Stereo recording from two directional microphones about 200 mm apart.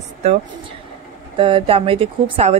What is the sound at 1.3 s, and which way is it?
A woman's voice, 25° right (ahead or behind).